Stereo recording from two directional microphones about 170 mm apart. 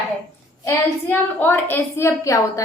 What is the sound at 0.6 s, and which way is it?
A woman's voice, 15° left (ahead or behind).